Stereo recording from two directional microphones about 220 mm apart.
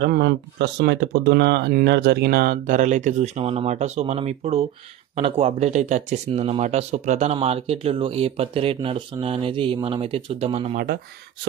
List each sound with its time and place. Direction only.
0.0 s speech: 50° right (ahead or behind); by 10.8 s 25° right (ahead or behind)